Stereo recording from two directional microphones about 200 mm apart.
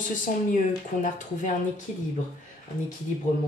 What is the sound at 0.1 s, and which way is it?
Speech, 40° left (ahead or behind).